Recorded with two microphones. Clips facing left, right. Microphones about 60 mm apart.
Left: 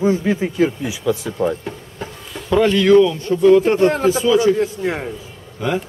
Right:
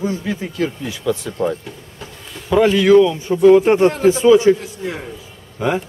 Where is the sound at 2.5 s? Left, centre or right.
Centre; by 4.5 s right.